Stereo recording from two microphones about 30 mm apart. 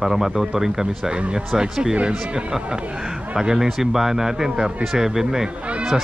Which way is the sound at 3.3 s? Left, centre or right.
Right.